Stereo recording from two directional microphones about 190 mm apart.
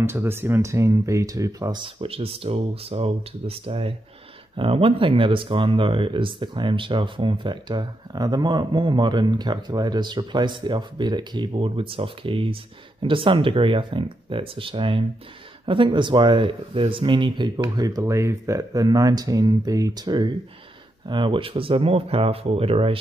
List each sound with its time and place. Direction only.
0.0 s speech: 10° right (ahead or behind); by 22.9 s 30° right (ahead or behind)